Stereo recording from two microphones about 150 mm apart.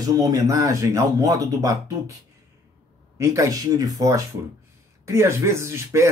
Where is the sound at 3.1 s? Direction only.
20° right (ahead or behind).